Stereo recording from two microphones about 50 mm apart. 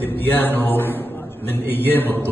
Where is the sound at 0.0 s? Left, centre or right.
Left.